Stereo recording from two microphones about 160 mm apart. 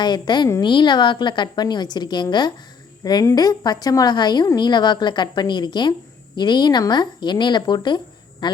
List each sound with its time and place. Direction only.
0.0 s a woman's voice: 25° left (ahead or behind)